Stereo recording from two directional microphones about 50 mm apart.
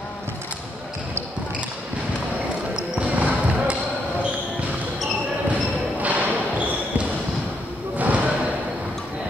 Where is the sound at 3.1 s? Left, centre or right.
Right.